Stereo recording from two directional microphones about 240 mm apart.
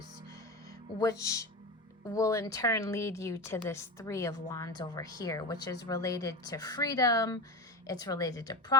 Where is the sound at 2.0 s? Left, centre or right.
Centre.